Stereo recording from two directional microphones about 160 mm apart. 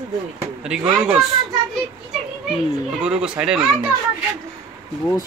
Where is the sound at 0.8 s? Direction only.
5° right (ahead or behind).